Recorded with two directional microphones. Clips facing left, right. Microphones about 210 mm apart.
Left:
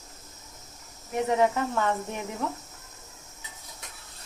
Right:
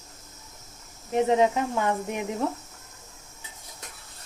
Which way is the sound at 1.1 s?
20° right (ahead or behind).